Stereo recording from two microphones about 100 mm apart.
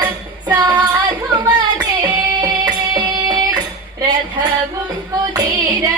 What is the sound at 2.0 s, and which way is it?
Music, 40° right (ahead or behind).